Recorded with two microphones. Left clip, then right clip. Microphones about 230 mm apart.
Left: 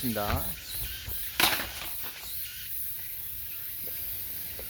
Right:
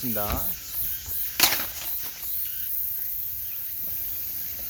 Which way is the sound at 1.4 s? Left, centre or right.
Centre.